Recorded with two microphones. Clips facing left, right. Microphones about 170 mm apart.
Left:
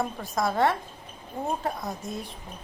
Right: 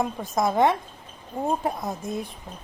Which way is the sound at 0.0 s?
20° right (ahead or behind).